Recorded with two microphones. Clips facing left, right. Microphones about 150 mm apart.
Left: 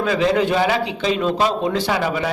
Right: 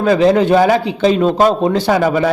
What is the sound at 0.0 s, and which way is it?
A man's voice, 40° right (ahead or behind).